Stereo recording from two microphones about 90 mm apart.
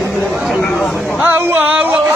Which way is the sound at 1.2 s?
25° right (ahead or behind).